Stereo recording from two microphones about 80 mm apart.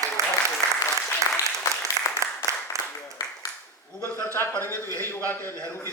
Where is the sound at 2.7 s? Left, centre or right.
Right.